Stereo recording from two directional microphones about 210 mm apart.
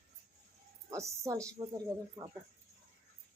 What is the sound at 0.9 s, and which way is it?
Speech, 15° right (ahead or behind).